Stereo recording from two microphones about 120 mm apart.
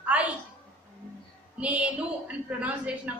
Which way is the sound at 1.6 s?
10° right (ahead or behind).